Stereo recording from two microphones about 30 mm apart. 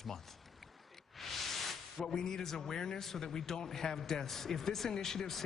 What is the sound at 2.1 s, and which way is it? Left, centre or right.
Speech, centre.